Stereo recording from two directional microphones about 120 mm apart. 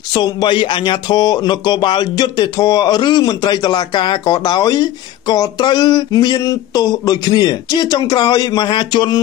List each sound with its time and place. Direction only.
0.1 s speech: 35° left (ahead or behind)